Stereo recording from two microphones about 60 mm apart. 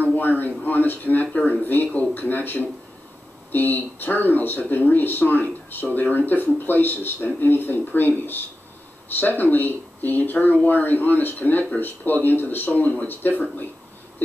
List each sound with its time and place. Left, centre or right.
0.0 s a man's voice: left
9.1 s speech: left